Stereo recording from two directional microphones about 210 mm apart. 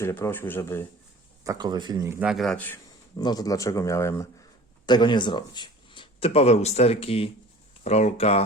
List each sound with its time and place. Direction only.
0.0 s a man's voice: 10° left (ahead or behind)
1.5 s a man's voice: 20° right (ahead or behind); by 8.4 s 30° left (ahead or behind)